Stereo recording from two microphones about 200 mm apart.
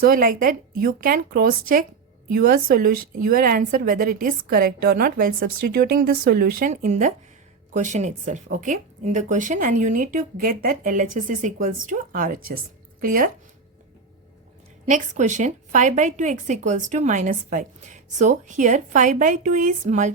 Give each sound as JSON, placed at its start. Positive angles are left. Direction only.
{"t": 0.0, "sound": "a woman's voice", "side_deg": -45}
{"t": 14.8, "sound": "a woman's voice", "side_deg": -35}